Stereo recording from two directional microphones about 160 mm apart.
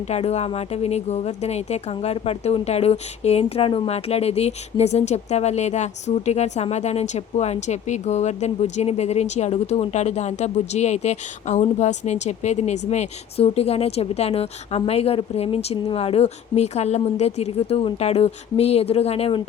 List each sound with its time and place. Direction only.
0.1 s a woman's voice: 40° left (ahead or behind)